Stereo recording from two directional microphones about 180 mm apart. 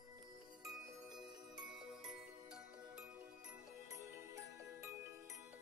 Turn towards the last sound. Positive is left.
turn(degrees=-15)  # may be behind; listen again after turning